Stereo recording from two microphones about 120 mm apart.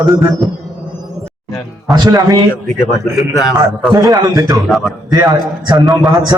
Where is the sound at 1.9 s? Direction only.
35° right (ahead or behind).